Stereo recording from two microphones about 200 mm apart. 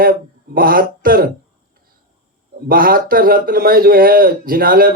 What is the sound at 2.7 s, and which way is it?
Speech, 45° right (ahead or behind).